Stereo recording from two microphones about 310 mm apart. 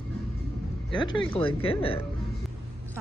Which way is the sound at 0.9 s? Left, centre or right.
Centre.